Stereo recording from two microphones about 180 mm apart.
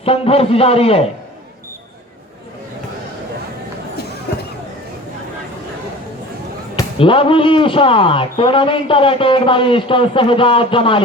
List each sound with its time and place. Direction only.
0.0 s a man's voice: 35° left (ahead or behind)
6.7 s a man's voice: 30° left (ahead or behind)